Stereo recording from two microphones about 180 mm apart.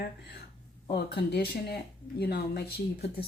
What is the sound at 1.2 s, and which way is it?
Speech, 65° left (ahead or behind).